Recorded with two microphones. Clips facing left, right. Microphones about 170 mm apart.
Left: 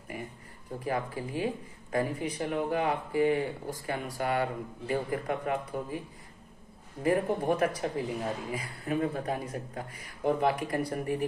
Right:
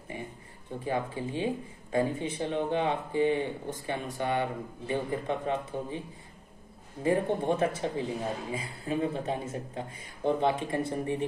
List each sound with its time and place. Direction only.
0.8 s a man's voice: 25° right (ahead or behind)